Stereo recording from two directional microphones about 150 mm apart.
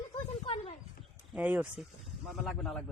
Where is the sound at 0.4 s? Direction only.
40° left (ahead or behind).